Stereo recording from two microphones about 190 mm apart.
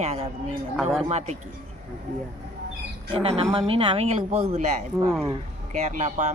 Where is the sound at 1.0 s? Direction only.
35° right (ahead or behind).